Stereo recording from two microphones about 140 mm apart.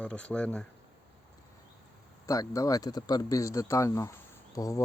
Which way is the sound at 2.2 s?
25° left (ahead or behind).